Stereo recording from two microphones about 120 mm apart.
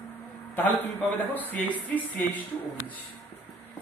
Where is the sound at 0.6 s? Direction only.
15° left (ahead or behind).